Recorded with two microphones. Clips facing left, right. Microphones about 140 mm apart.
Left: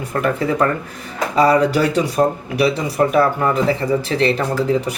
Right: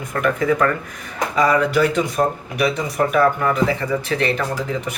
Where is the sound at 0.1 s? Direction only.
30° left (ahead or behind).